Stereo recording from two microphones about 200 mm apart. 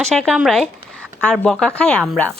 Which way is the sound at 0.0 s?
Centre (ahead or behind).